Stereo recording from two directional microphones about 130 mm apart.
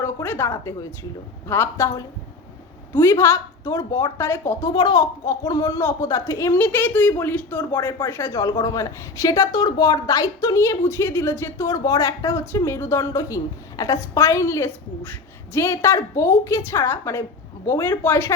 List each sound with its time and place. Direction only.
0.0 s a man's voice: 20° left (ahead or behind)
4.7 s a man's voice: 30° left (ahead or behind)